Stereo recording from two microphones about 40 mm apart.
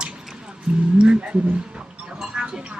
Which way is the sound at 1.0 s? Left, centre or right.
Right.